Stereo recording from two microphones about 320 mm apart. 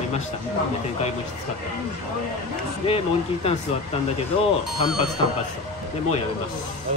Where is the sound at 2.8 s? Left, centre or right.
Centre.